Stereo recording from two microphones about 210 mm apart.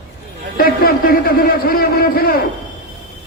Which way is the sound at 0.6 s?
45° left (ahead or behind).